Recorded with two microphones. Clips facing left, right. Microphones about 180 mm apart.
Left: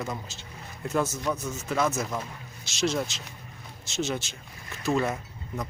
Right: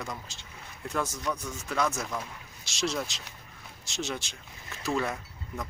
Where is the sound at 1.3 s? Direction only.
5° left (ahead or behind).